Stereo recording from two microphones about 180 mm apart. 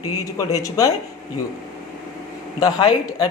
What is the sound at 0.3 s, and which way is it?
Speech, 20° left (ahead or behind).